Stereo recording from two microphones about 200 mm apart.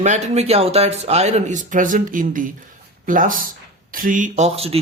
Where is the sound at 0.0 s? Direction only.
35° right (ahead or behind).